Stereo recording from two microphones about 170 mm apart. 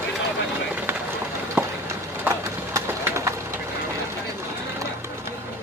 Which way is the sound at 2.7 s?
15° right (ahead or behind).